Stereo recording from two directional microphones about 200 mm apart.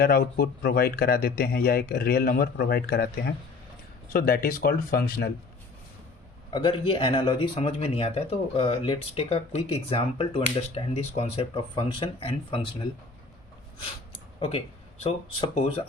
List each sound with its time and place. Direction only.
0.0 s speech: 50° left (ahead or behind)
6.5 s speech: 25° left (ahead or behind)
14.1 s a sound: 30° left (ahead or behind)
15.0 s speech: 30° left (ahead or behind)